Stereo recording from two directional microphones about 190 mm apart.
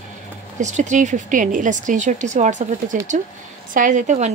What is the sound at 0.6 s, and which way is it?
Speech, 40° right (ahead or behind).